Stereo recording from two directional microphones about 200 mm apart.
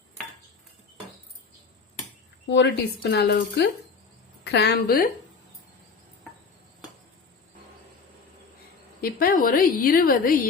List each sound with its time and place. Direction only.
2.5 s a woman's voice: 65° left (ahead or behind); by 5.1 s 45° left (ahead or behind)
9.0 s a woman's voice: 45° left (ahead or behind)